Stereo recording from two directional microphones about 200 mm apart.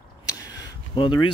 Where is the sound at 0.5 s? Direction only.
25° left (ahead or behind).